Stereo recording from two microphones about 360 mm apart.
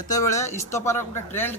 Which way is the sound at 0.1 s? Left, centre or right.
Centre.